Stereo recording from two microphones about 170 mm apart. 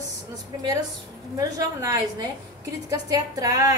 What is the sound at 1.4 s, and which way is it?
A woman's voice, 20° right (ahead or behind).